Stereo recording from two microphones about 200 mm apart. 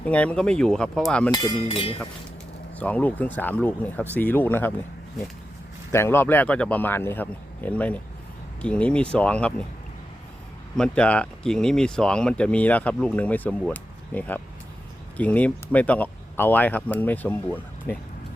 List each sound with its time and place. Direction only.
0.0 s speech: 5° left (ahead or behind)
1.3 s speech: 25° left (ahead or behind)
2.7 s speech: 5° left (ahead or behind)
5.9 s speech: 10° left (ahead or behind)
10.8 s speech: 5° left (ahead or behind)